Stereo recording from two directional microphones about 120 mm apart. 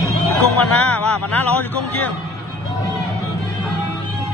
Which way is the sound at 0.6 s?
15° left (ahead or behind).